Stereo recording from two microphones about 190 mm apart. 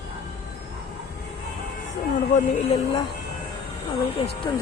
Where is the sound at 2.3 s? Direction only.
40° left (ahead or behind).